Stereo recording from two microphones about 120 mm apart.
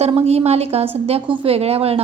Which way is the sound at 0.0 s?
60° right (ahead or behind).